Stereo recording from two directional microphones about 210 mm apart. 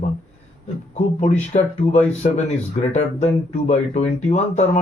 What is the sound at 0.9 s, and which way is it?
Speech, 35° left (ahead or behind).